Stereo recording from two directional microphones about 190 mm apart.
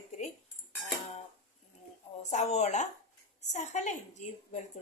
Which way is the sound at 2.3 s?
35° left (ahead or behind).